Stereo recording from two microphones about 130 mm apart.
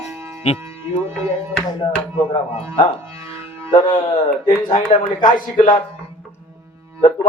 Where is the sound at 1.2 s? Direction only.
20° right (ahead or behind).